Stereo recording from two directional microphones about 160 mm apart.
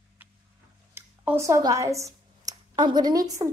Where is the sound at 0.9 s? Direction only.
15° right (ahead or behind).